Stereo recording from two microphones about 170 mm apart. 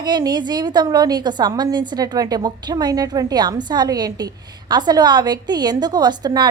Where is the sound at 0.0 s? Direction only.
25° right (ahead or behind).